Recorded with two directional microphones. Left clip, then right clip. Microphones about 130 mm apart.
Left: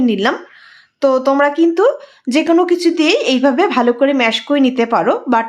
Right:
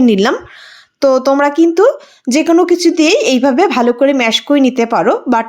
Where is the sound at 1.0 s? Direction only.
30° right (ahead or behind).